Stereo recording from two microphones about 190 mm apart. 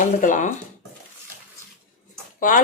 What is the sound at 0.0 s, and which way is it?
Speech, 45° left (ahead or behind).